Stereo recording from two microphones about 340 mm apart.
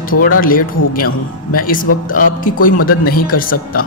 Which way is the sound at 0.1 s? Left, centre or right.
Left.